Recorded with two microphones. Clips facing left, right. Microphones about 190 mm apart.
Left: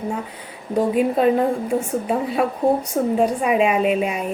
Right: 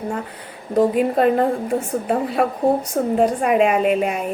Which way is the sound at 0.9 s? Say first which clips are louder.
Even; centre (ahead or behind).